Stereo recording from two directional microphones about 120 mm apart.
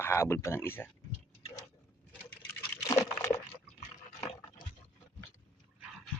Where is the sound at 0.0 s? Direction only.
20° left (ahead or behind).